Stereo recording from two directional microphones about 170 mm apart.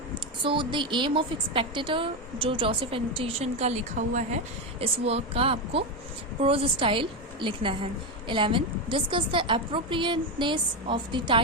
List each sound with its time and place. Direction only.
0.1 s a woman's voice: 30° right (ahead or behind); by 4.4 s 45° right (ahead or behind)
4.8 s a woman's voice: 35° right (ahead or behind)